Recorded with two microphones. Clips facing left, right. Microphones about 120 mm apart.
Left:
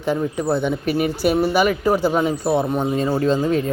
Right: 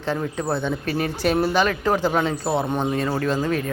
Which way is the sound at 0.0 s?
15° left (ahead or behind).